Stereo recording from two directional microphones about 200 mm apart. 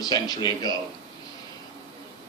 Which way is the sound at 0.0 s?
20° left (ahead or behind).